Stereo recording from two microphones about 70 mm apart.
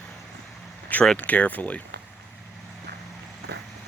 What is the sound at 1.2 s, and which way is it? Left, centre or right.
Speech, left.